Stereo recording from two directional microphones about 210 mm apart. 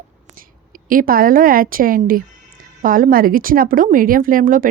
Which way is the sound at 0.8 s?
40° right (ahead or behind).